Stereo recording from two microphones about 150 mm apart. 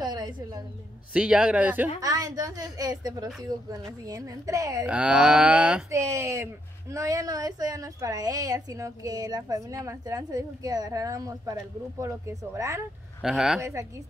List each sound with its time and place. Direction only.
0.0 s a sound: 25° right (ahead or behind)
1.1 s speech: 5° right (ahead or behind)
2.0 s a woman's voice: 25° right (ahead or behind)
4.8 s moo: 5° right (ahead or behind)
5.9 s a woman's voice: 20° right (ahead or behind)
13.2 s moo: 5° right (ahead or behind)
13.6 s a woman's voice: 20° right (ahead or behind)